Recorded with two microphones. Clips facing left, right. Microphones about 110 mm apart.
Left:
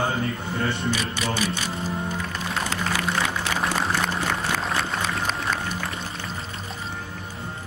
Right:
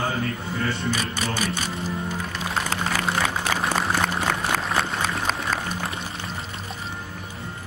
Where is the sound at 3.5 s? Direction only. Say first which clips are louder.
Even; 40° right (ahead or behind).